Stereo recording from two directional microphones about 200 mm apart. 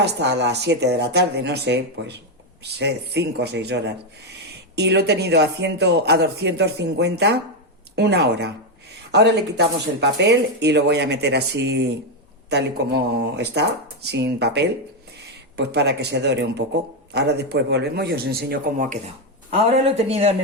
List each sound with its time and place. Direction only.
0.0 s speech: 55° right (ahead or behind)
20.1 s speech: 30° right (ahead or behind)